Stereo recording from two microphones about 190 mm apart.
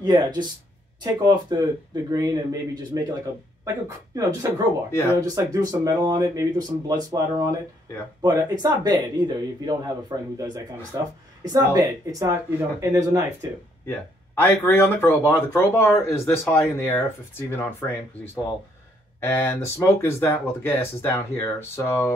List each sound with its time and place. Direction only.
0.0 s speech: 20° right (ahead or behind)
4.9 s speech: 15° left (ahead or behind)
5.2 s speech: 20° right (ahead or behind)
13.8 s speech: 15° left (ahead or behind)
19.2 s speech: 10° left (ahead or behind)